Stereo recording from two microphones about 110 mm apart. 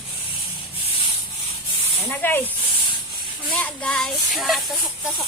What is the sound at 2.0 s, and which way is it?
Speech, 20° left (ahead or behind).